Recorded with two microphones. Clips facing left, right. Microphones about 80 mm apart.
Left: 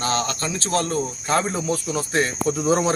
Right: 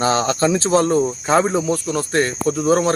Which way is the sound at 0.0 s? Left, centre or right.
Right.